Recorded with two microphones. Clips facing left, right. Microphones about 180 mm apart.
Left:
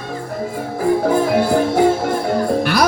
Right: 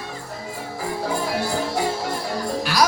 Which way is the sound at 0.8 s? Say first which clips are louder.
Left 11 dB; 55° left (ahead or behind).